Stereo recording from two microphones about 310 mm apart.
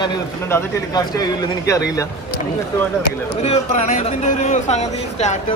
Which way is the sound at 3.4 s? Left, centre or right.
Left.